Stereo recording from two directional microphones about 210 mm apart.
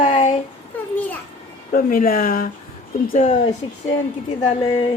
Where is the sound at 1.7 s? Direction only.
40° left (ahead or behind).